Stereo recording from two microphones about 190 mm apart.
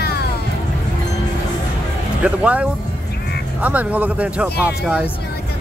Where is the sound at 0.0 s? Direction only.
55° left (ahead or behind).